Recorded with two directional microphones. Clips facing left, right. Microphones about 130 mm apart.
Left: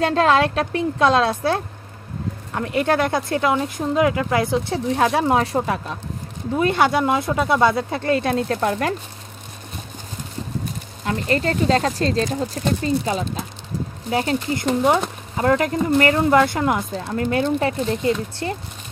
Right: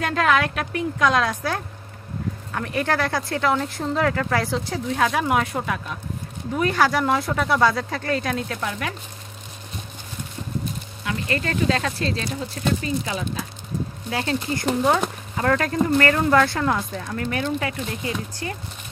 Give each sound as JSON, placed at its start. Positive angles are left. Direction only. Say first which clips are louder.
{"t": 0.0, "sound": "speech", "louder": "left 4 dB", "side_deg": 30}
{"t": 11.1, "sound": "speech", "louder": "left 5 dB", "side_deg": 30}
{"t": 14.1, "sound": "speech", "louder": "left 4 dB", "side_deg": 20}
{"t": 16.9, "sound": "speech", "louder": "left 5 dB", "side_deg": 30}